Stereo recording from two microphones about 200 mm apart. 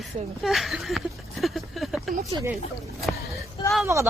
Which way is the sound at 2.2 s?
15° right (ahead or behind).